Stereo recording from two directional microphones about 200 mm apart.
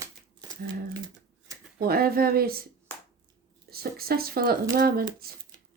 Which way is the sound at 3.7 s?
50° right (ahead or behind).